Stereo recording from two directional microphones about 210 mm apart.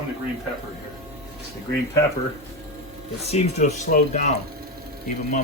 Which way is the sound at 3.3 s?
30° left (ahead or behind).